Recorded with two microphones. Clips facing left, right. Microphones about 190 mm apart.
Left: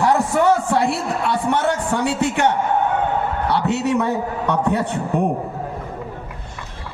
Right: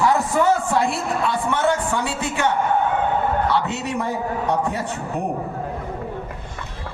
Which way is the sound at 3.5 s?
65° left (ahead or behind).